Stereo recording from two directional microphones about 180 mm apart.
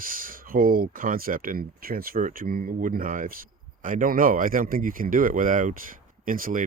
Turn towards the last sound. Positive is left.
turn(degrees=-50)  # may be behind; listen again after turning